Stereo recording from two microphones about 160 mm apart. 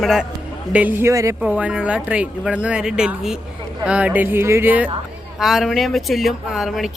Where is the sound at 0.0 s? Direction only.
Centre (ahead or behind); by 1.4 s 20° right (ahead or behind).